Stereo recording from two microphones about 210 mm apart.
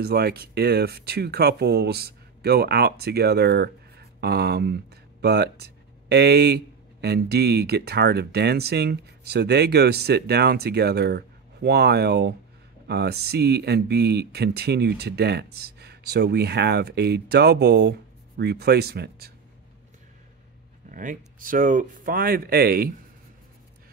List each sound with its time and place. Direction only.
0.0 s speech: 50° right (ahead or behind)
20.9 s speech: 40° right (ahead or behind)